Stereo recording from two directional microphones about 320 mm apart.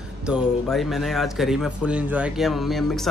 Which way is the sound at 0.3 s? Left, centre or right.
Centre.